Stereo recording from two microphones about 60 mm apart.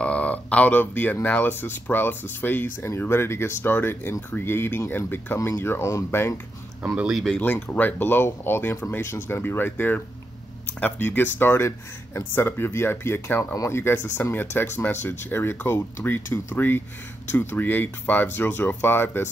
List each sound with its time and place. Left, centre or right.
0.0 s a sound: left
1.2 s speech: left
7.3 s speech: left